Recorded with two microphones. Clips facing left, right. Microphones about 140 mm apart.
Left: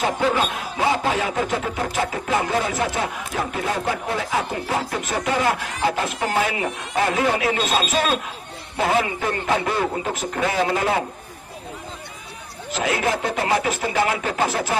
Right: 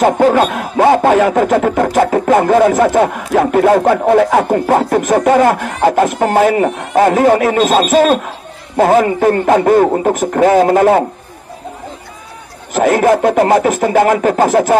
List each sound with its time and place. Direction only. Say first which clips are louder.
0.0 s a man's voice: right 11 dB; 55° right (ahead or behind)
12.7 s speech: right 12 dB; 50° right (ahead or behind)